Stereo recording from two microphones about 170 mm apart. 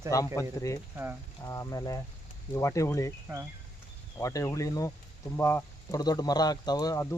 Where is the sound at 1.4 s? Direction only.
20° left (ahead or behind).